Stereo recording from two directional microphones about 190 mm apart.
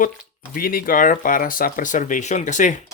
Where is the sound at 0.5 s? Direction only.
50° left (ahead or behind).